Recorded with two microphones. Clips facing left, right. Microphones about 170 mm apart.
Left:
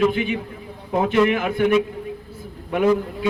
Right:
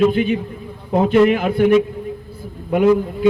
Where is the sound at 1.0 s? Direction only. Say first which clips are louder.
Right 5 dB; 35° right (ahead or behind).